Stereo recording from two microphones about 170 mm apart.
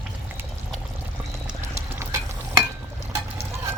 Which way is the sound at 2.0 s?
15° right (ahead or behind).